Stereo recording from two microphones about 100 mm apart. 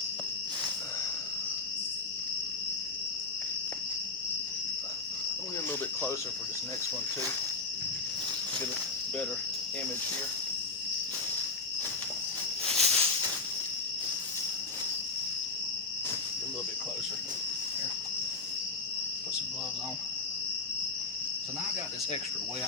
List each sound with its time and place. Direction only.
12.6 s music: 85° right